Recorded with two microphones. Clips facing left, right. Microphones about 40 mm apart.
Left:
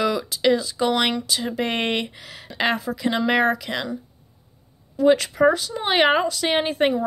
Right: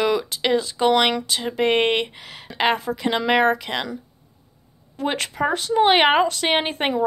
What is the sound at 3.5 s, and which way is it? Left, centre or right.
Speech, right.